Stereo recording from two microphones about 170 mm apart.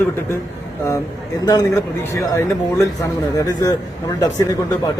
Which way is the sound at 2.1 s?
15° left (ahead or behind).